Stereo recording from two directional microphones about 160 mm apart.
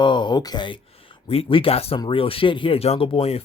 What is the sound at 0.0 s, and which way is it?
Speech, 30° left (ahead or behind).